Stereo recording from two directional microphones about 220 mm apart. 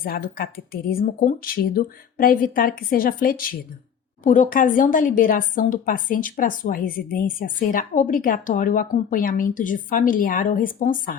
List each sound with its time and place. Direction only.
0.0 s a woman's voice: 40° left (ahead or behind)